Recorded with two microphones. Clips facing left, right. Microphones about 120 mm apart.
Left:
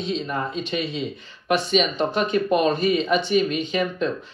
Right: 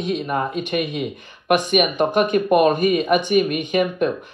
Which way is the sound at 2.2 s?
50° right (ahead or behind).